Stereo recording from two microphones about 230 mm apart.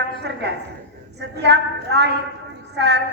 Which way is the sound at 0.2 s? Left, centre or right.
Right.